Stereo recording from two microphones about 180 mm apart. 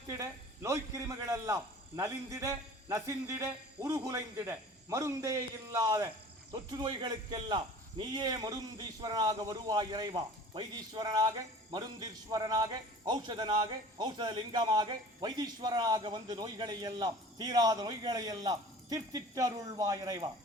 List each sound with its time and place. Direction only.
0.2 s a man's voice: 15° right (ahead or behind)